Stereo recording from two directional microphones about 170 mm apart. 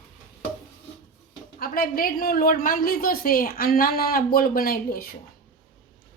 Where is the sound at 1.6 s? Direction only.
60° left (ahead or behind).